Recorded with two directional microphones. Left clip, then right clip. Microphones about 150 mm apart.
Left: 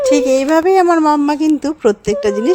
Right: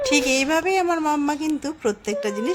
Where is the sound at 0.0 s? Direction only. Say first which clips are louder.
Left 8 dB; 45° left (ahead or behind).